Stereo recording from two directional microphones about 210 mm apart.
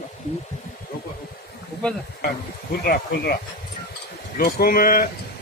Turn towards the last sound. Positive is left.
turn(degrees=40)  # may be behind; listen again after turning